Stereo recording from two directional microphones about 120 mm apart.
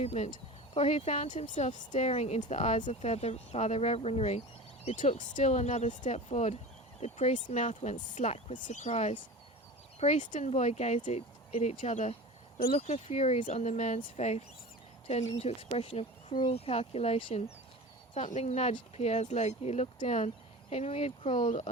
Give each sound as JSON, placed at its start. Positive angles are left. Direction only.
{"t": 0.0, "sound": "speech", "side_deg": 65}
{"t": 2.5, "sound": "speech", "side_deg": 80}
{"t": 4.9, "sound": "speech", "side_deg": 90}
{"t": 7.0, "sound": "speech", "side_deg": 80}
{"t": 10.0, "sound": "speech", "side_deg": 85}
{"t": 12.5, "sound": "speech", "side_deg": 60}
{"t": 15.4, "sound": "speech", "side_deg": 55}
{"t": 18.1, "sound": "speech", "side_deg": 80}
{"t": 21.3, "sound": "speech", "side_deg": 40}